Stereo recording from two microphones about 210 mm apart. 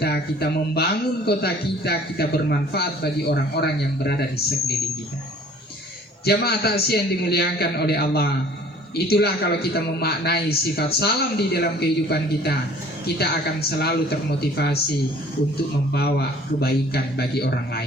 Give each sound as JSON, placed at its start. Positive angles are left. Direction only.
{"t": 0.0, "sound": "a man's voice", "side_deg": 50}
{"t": 6.2, "sound": "a man's voice", "side_deg": 50}
{"t": 15.9, "sound": "a man's voice", "side_deg": 50}